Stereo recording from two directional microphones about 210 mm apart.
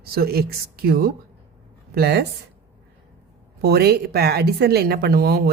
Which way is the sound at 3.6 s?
50° right (ahead or behind).